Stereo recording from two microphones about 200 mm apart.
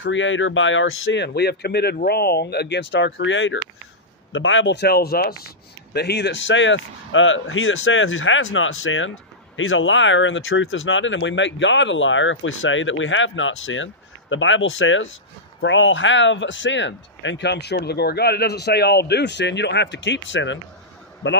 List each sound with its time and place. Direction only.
0.0 s speech: 70° left (ahead or behind)